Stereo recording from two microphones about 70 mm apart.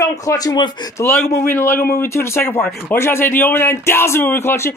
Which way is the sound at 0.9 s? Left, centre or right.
Left.